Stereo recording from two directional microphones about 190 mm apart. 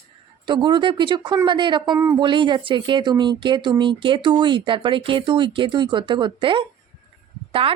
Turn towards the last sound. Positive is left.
turn(degrees=-30)  # may be behind; listen again after turning